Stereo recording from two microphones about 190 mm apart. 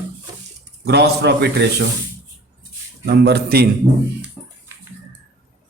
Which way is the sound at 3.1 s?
55° right (ahead or behind).